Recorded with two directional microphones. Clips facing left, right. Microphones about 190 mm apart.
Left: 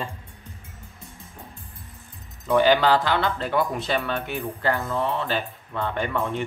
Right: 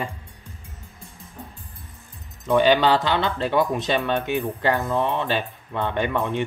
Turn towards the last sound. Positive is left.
turn(degrees=-20)  # may be behind; listen again after turning